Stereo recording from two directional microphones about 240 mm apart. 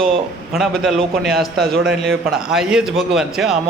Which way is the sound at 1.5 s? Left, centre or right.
Right.